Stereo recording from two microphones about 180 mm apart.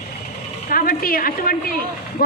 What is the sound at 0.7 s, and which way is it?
A woman's voice, 55° left (ahead or behind).